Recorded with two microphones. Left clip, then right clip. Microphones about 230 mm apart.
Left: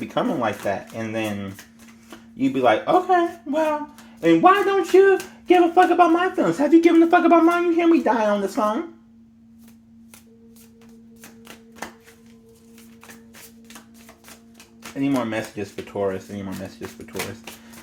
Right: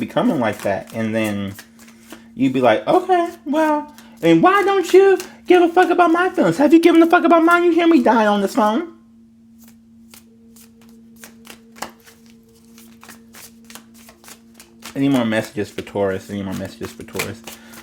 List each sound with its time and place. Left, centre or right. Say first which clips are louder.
0.0 s speech: right 4 dB; right
4.2 s speech: right 2 dB; right
14.9 s speech: right 5 dB; right